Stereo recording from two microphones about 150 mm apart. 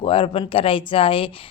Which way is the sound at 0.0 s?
35° left (ahead or behind).